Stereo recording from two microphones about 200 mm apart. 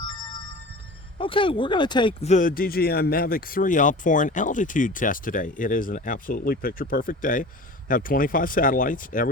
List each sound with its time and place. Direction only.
1.2 s speech: 25° left (ahead or behind)
2.3 s speech: 40° left (ahead or behind)